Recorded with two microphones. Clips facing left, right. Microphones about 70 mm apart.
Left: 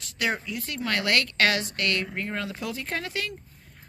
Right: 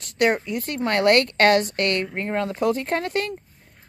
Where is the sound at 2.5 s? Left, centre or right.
Right.